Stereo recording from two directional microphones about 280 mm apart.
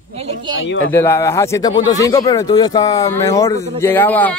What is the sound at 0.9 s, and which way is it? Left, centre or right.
Speech, centre.